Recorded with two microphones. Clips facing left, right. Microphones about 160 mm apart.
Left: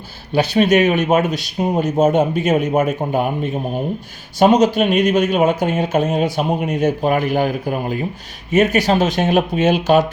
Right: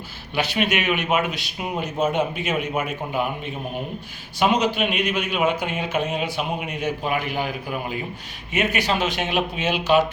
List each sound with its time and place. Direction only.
0.3 s speech: 40° left (ahead or behind)